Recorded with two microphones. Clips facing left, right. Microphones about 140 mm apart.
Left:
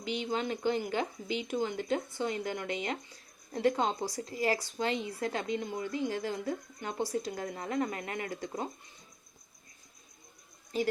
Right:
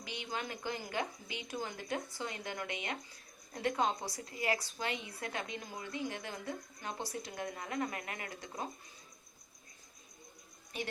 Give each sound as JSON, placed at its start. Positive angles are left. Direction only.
{"t": 0.0, "sound": "speech", "side_deg": 25}